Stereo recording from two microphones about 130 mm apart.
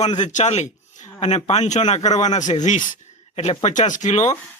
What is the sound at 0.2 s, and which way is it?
A man's voice, 70° left (ahead or behind).